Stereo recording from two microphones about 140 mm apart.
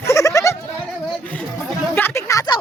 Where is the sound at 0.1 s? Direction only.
20° left (ahead or behind).